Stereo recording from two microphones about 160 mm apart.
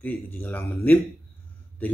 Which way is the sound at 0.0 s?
10° left (ahead or behind).